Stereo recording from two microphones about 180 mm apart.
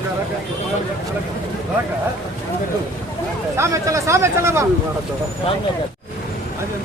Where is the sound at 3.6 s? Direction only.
15° right (ahead or behind).